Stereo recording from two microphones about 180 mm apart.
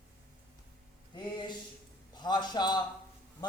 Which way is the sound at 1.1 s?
25° left (ahead or behind).